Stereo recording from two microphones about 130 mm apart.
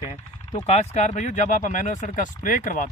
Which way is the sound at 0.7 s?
60° left (ahead or behind).